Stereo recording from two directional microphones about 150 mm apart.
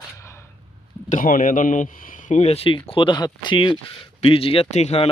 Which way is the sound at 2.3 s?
45° left (ahead or behind).